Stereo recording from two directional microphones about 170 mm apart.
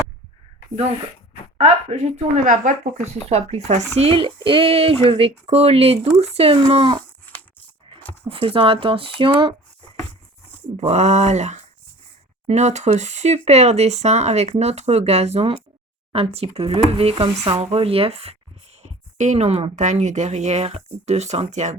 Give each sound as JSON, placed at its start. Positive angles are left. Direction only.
{"t": 1.5, "sound": "speech", "side_deg": -40}
{"t": 3.2, "sound": "speech", "side_deg": -40}
{"t": 8.2, "sound": "speech", "side_deg": -30}
{"t": 10.8, "sound": "speech", "side_deg": -40}